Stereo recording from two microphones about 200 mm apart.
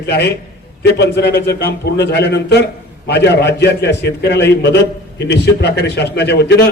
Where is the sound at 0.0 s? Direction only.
55° left (ahead or behind).